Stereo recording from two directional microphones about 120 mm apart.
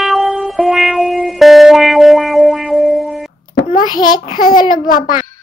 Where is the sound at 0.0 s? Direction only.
Centre (ahead or behind).